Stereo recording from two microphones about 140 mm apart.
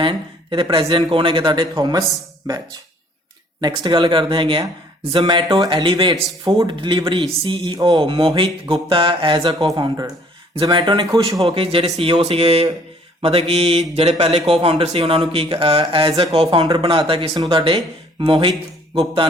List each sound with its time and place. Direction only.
0.0 s a man's voice: 35° right (ahead or behind)
3.6 s a man's voice: 35° right (ahead or behind)
5.5 s speech: 25° right (ahead or behind)
5.7 s a man's voice: 40° right (ahead or behind)
11.4 s a man's voice: 40° right (ahead or behind)